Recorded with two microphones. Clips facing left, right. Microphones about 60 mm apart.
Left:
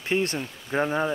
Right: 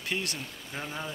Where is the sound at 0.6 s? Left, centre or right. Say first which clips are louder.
Left 13 dB; left.